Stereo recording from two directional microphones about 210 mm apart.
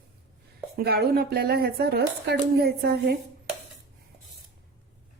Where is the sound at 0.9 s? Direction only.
50° right (ahead or behind).